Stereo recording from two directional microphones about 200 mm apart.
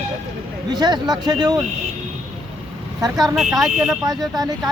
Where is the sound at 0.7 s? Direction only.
20° right (ahead or behind).